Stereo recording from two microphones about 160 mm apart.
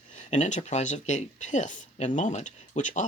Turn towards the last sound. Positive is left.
turn(degrees=50)  # may be behind; listen again after turning